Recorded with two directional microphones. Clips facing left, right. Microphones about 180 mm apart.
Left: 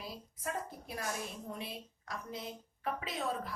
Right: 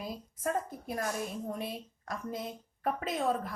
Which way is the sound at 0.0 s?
50° right (ahead or behind).